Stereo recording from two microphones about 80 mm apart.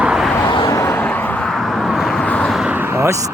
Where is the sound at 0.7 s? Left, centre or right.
Left.